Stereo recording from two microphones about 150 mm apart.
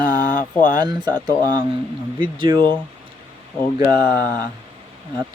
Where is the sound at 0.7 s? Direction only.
25° right (ahead or behind).